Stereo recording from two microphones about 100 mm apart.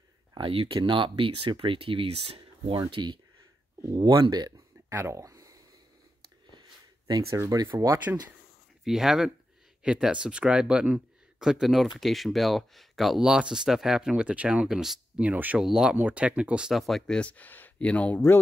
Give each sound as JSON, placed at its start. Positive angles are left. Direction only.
{"t": 0.4, "sound": "speech", "side_deg": -65}
{"t": 2.6, "sound": "speech", "side_deg": -60}
{"t": 3.9, "sound": "speech", "side_deg": -40}
{"t": 4.2, "sound": "a sound", "side_deg": -45}
{"t": 4.9, "sound": "a sound", "side_deg": -30}
{"t": 7.1, "sound": "speech", "side_deg": -35}
{"t": 8.8, "sound": "speech", "side_deg": -5}
{"t": 17.2, "sound": "speech", "side_deg": 15}